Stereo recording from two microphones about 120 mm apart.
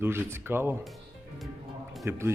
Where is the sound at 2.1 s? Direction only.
20° right (ahead or behind).